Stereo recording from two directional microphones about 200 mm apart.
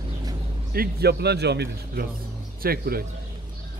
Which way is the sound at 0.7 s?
55° right (ahead or behind).